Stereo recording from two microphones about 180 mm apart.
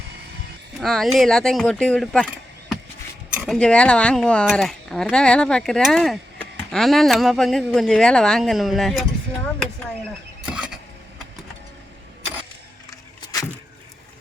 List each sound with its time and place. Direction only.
0.8 s speech: centre (ahead or behind)
3.3 s speech: centre (ahead or behind)
10.4 s vehicle: 5° right (ahead or behind)
12.9 s a sound: 20° left (ahead or behind)